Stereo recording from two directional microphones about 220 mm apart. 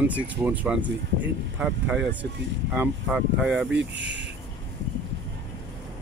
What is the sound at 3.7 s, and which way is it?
Speech, 55° right (ahead or behind).